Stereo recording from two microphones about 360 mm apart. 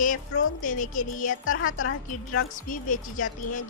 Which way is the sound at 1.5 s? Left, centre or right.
Left.